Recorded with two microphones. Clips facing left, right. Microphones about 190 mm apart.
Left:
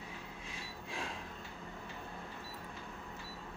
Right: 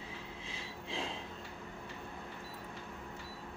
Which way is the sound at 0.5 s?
25° right (ahead or behind).